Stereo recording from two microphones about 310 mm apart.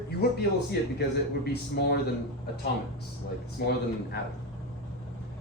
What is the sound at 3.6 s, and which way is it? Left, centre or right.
Speech, left.